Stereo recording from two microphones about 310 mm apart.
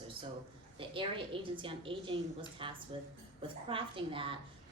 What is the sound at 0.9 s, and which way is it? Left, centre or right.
A woman's voice, centre.